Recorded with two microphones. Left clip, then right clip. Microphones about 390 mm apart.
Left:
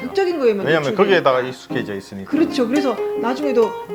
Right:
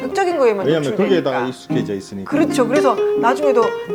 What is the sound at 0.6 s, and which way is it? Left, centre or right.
Speech, left.